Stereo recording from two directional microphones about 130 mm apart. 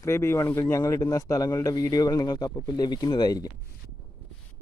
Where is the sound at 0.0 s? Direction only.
20° left (ahead or behind).